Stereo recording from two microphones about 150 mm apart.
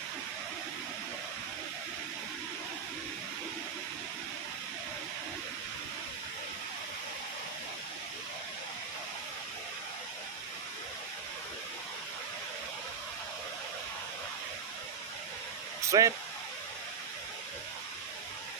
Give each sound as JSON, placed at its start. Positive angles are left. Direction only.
{"t": 15.9, "sound": "speech", "side_deg": -20}